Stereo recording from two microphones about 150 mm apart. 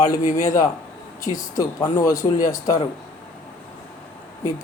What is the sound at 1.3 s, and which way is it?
A man's voice, 25° left (ahead or behind).